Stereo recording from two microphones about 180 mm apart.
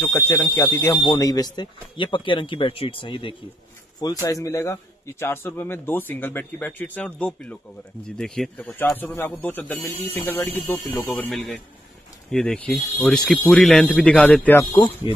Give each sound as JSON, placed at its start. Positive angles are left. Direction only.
{"t": 0.0, "sound": "a man's voice", "side_deg": 15}
{"t": 15.1, "sound": "speech", "side_deg": 30}